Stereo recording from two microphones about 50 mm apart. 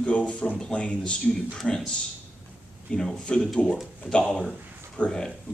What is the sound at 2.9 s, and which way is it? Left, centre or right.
Speech, left.